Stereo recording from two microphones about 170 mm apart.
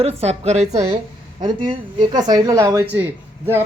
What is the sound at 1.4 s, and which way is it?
Speech, 25° right (ahead or behind).